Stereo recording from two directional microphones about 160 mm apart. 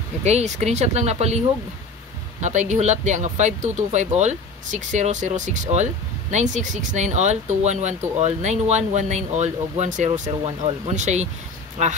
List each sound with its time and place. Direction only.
0.2 s speech: 45° right (ahead or behind)
2.4 s speech: 50° right (ahead or behind)